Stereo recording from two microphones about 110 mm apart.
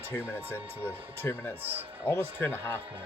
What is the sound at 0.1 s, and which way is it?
Speech, 20° left (ahead or behind).